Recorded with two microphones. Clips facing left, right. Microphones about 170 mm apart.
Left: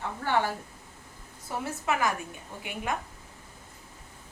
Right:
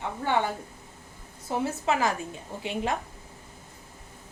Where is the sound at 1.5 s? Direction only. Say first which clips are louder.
Right 4 dB; 25° right (ahead or behind).